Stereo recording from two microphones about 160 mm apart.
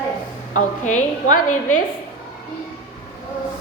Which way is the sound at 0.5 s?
50° left (ahead or behind).